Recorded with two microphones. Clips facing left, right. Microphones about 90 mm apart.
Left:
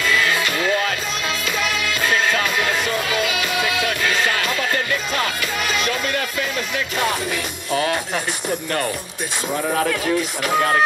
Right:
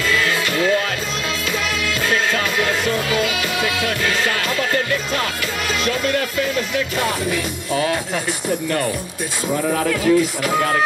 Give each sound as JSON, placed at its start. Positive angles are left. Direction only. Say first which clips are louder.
{"t": 2.0, "sound": "music", "louder": "left 1 dB", "side_deg": 20}
{"t": 9.8, "sound": "speech", "louder": "right 5 dB", "side_deg": 45}